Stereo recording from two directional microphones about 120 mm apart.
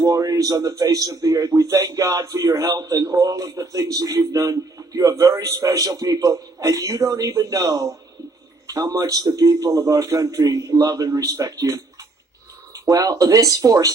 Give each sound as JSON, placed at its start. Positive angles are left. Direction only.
{"t": 0.0, "sound": "a man's voice", "side_deg": -30}